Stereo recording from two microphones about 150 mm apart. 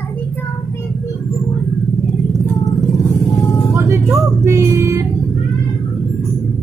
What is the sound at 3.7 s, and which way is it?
Vehicle, 20° right (ahead or behind).